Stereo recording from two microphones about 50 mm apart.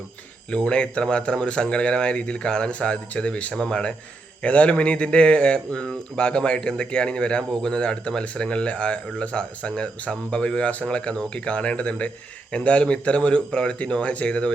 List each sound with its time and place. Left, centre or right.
0.5 s speech: left